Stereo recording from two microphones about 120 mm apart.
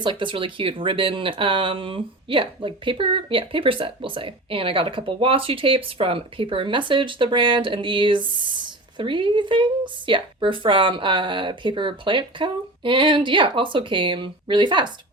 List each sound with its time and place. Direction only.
0.0 s speech: 45° right (ahead or behind)